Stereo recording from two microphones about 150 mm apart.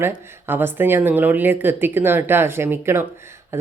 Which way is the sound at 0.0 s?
15° right (ahead or behind).